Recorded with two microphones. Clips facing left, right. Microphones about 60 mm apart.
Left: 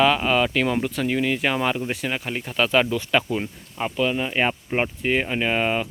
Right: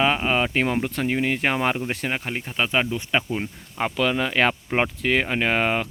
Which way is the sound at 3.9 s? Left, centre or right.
Right.